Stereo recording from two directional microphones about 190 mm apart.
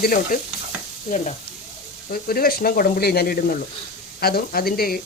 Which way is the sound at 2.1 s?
50° left (ahead or behind).